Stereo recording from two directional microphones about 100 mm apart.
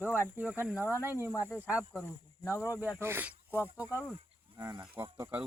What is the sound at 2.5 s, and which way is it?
Speech, 30° left (ahead or behind).